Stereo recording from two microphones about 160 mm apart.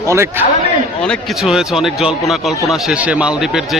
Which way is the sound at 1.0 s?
Centre (ahead or behind).